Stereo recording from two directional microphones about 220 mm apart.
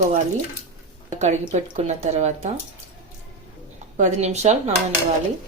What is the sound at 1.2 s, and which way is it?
Speech, 30° right (ahead or behind).